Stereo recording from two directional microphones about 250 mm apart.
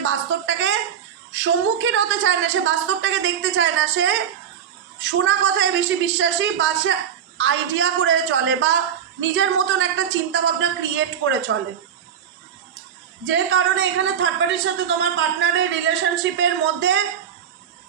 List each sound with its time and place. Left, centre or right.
0.0 s a sound: right
1.3 s a woman's voice: right
13.2 s a woman's voice: right